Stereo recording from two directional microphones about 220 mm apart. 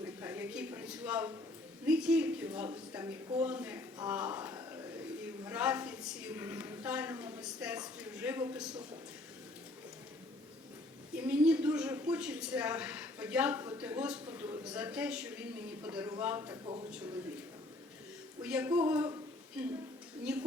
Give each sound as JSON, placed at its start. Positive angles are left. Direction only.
{"t": 0.0, "sound": "a sound", "side_deg": -10}
{"t": 1.8, "sound": "a woman's voice", "side_deg": -5}
{"t": 11.1, "sound": "a woman's voice", "side_deg": -5}
{"t": 18.4, "sound": "speech", "side_deg": -5}
{"t": 20.3, "sound": "a woman's voice", "side_deg": -5}